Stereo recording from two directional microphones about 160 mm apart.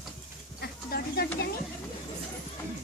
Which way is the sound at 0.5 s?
85° left.